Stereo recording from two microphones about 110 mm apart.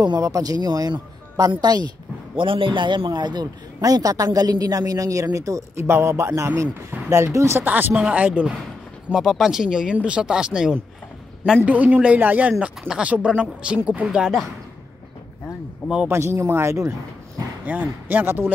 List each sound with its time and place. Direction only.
0.0 s a man's voice: 35° right (ahead or behind)
2.3 s a man's voice: 50° right (ahead or behind); by 8.5 s 15° right (ahead or behind)
9.1 s speech: 5° right (ahead or behind)
16.1 s speech: 25° right (ahead or behind)
17.6 s speech: 15° right (ahead or behind)